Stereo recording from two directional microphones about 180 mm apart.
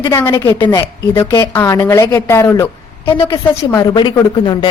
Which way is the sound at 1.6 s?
10° left (ahead or behind).